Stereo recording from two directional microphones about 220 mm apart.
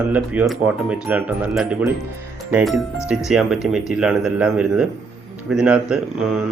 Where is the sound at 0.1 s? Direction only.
5° right (ahead or behind).